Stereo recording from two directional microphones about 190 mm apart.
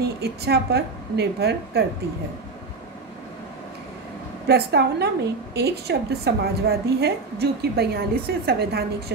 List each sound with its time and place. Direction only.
0.0 s a woman's voice: 60° right (ahead or behind)
4.5 s a woman's voice: 60° right (ahead or behind)